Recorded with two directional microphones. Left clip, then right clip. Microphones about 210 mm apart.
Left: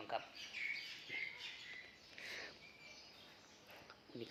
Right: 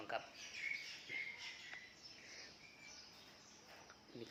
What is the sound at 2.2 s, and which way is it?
Chirp, 50° left (ahead or behind).